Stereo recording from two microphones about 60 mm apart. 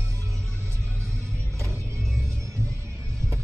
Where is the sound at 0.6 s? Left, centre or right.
Right.